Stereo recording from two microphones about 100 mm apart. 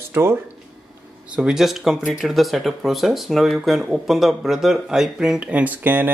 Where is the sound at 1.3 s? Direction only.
10° right (ahead or behind).